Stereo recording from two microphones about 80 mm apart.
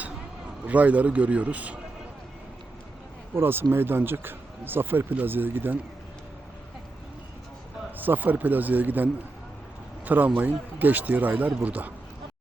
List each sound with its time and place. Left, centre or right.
0.6 s speech: centre
3.3 s speech: right
7.9 s speech: right
10.1 s speech: right